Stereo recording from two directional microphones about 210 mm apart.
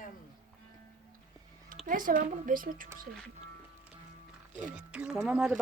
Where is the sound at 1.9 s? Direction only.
40° right (ahead or behind).